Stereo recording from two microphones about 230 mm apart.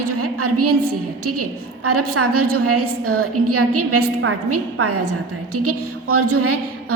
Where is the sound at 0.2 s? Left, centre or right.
Right.